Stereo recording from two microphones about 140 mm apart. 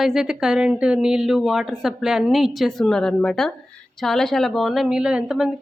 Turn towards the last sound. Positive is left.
turn(degrees=-5)  # may be behind; listen again after turning